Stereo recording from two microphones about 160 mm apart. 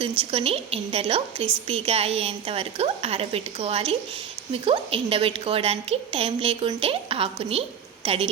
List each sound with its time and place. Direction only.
0.2 s a woman's voice: 35° right (ahead or behind)